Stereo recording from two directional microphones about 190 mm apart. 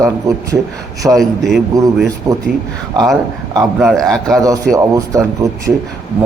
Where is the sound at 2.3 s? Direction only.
20° right (ahead or behind).